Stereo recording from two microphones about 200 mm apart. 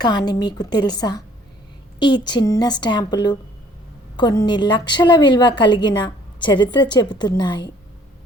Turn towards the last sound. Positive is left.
turn(degrees=20)  # may be behind; listen again after turning